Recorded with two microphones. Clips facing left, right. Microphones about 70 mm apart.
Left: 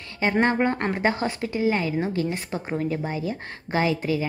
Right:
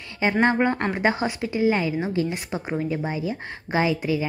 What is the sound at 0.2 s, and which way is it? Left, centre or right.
A woman's voice, right.